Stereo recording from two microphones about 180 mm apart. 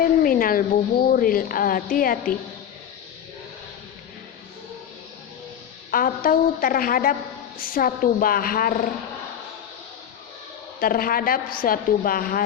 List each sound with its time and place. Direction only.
0.0 s a woman's voice: 50° left (ahead or behind)
5.9 s a woman's voice: 50° left (ahead or behind)
10.8 s a woman's voice: 55° left (ahead or behind)